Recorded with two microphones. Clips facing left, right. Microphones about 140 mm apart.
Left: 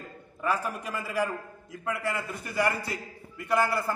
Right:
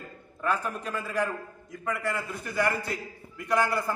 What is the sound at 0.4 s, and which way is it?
A man's voice, 10° left (ahead or behind).